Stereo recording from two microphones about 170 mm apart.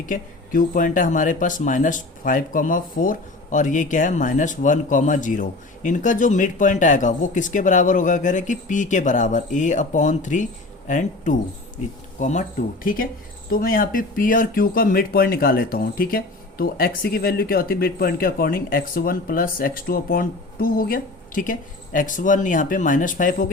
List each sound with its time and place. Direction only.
0.0 s speech: 50° left (ahead or behind)